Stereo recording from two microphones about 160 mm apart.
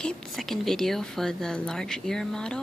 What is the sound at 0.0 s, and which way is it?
Speech, centre (ahead or behind).